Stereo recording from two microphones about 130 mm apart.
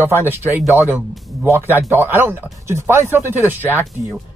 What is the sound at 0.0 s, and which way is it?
Speech, 15° right (ahead or behind).